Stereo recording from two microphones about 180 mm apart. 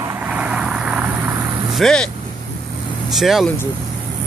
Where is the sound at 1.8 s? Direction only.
5° left (ahead or behind).